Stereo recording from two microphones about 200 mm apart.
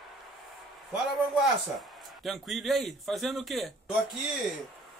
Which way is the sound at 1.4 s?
Centre (ahead or behind).